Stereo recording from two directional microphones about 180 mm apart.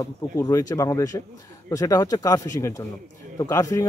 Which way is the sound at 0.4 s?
15° left (ahead or behind).